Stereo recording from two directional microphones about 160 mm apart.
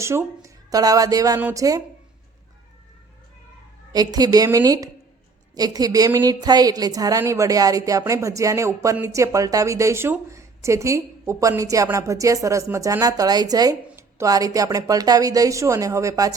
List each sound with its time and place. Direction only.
0.0 s speech: 15° right (ahead or behind)
1.4 s speech: 10° right (ahead or behind)
3.9 s a woman's voice: 25° right (ahead or behind)